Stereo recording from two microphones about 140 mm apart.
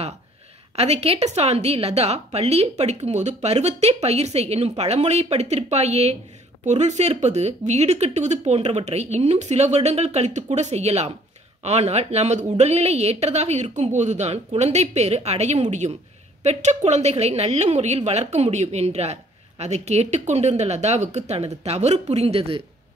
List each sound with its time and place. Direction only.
0.7 s a woman's voice: 50° right (ahead or behind)